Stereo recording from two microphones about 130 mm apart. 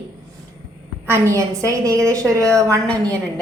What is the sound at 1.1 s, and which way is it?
A woman's voice, 25° right (ahead or behind).